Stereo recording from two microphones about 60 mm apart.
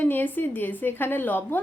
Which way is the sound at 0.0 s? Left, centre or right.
Left.